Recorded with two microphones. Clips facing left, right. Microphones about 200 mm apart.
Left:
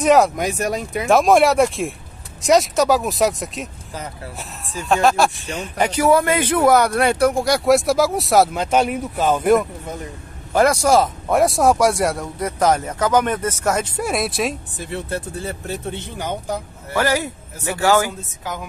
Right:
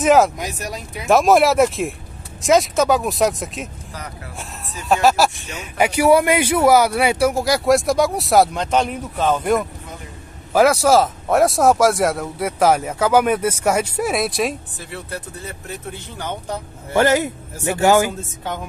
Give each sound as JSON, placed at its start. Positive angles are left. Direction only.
{"t": 0.0, "sound": "speech", "side_deg": 0}
{"t": 0.4, "sound": "speech", "side_deg": 50}
{"t": 1.0, "sound": "speech", "side_deg": 0}
{"t": 4.8, "sound": "speech", "side_deg": -5}
{"t": 14.9, "sound": "speech", "side_deg": 25}
{"t": 16.2, "sound": "speech", "side_deg": 10}
{"t": 16.9, "sound": "speech", "side_deg": -25}